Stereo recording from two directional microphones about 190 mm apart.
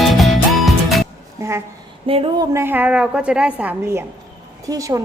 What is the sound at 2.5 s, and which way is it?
A woman's voice, 15° right (ahead or behind).